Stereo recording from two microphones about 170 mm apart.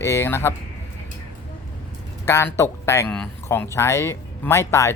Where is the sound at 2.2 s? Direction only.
15° left (ahead or behind).